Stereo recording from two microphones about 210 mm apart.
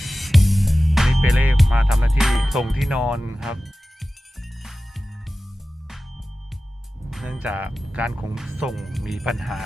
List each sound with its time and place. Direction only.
0.0 s music: centre (ahead or behind)
7.1 s speech: 5° right (ahead or behind)